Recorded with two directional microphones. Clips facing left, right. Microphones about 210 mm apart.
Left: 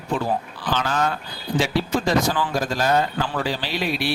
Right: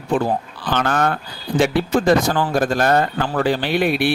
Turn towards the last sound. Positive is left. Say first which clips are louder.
# right 7 dB
turn(degrees=-55)  # may be behind; listen again after turning